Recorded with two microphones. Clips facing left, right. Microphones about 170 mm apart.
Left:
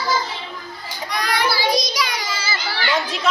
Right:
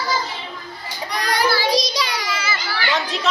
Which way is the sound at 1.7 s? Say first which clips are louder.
Right 1 dB; 30° right (ahead or behind).